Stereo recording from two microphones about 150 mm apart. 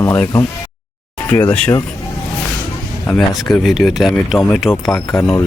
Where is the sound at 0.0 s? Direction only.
15° left (ahead or behind).